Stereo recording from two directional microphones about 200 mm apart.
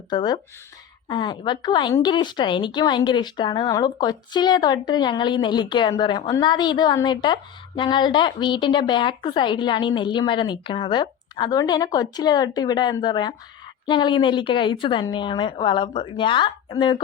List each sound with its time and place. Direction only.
0.1 s speech: 20° left (ahead or behind)